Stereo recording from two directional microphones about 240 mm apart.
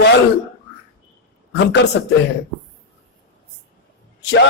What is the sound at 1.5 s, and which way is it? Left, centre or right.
Speech, left.